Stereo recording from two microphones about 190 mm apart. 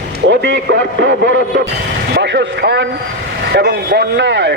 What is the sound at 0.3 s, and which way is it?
A man's voice, 75° right (ahead or behind).